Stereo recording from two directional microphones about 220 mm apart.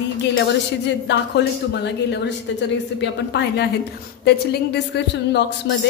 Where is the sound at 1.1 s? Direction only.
50° left (ahead or behind).